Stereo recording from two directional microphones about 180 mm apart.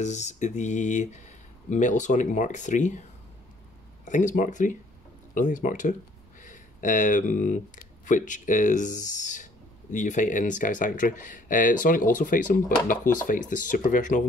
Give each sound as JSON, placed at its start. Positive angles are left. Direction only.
{"t": 0.0, "sound": "speech", "side_deg": 40}